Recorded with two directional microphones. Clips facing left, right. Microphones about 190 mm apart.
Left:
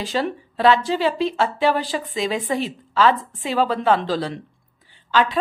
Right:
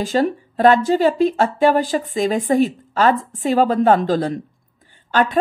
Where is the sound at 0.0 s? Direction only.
45° right (ahead or behind).